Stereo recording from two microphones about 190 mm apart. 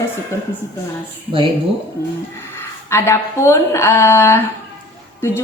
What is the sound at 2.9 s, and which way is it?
A woman's voice, 15° left (ahead or behind).